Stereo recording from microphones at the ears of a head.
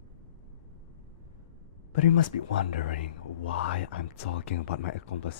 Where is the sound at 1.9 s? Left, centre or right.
Left.